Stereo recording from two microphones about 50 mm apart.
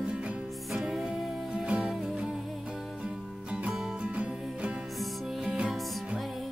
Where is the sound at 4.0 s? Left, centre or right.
Right.